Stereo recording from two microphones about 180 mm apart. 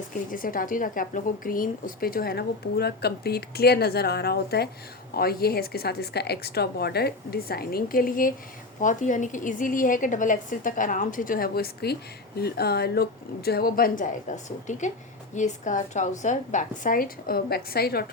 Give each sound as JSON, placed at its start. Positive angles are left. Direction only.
{"t": 0.3, "sound": "a woman's voice", "side_deg": 50}